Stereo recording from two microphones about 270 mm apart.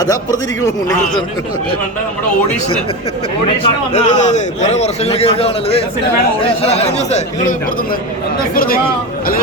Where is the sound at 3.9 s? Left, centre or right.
Left.